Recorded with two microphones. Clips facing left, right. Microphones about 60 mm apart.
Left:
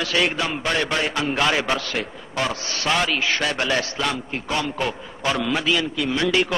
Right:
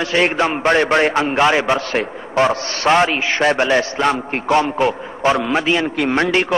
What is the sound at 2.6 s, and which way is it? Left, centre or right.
Speech, right.